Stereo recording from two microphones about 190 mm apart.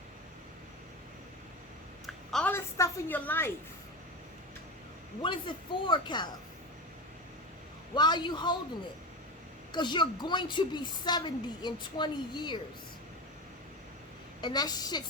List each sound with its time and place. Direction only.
2.3 s a woman's voice: 10° left (ahead or behind)
5.2 s a woman's voice: 25° left (ahead or behind)
7.9 s a woman's voice: 20° left (ahead or behind)
9.7 s a woman's voice: 25° left (ahead or behind)
14.4 s a woman's voice: 20° left (ahead or behind)